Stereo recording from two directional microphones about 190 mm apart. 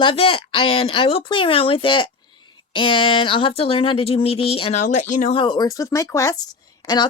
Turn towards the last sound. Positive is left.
turn(degrees=20)  # may be behind; listen again after turning